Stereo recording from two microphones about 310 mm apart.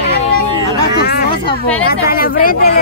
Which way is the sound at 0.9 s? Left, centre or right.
Left.